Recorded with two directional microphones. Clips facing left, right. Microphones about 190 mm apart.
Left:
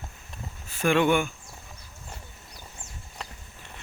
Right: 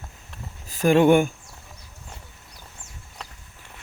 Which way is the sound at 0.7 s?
40° right (ahead or behind).